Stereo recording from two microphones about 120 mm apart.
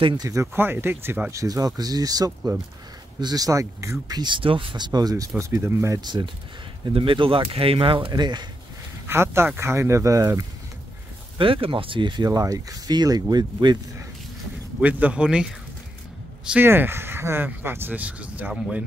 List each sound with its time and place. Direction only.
0.0 s speech: 40° right (ahead or behind)
0.3 s speech: 20° right (ahead or behind)
1.3 s speech: 30° right (ahead or behind)
4.2 s speech: 45° right (ahead or behind); by 5.9 s 20° right (ahead or behind)
5.9 s speech: 40° right (ahead or behind)
9.0 s speech: 20° right (ahead or behind)
11.3 s speech: 45° right (ahead or behind)
12.3 s speech: 30° right (ahead or behind)
14.8 s speech: 10° right (ahead or behind)